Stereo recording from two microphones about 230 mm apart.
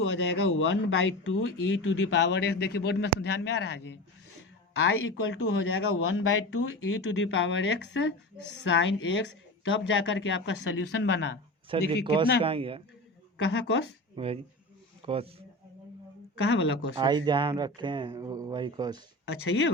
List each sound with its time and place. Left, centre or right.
0.0 s speech: left
11.7 s speech: right
13.3 s speech: left
14.2 s speech: right
16.4 s speech: left
16.9 s speech: centre
19.3 s speech: left